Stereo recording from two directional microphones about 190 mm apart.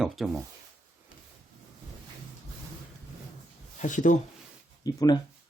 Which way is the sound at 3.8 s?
40° left (ahead or behind).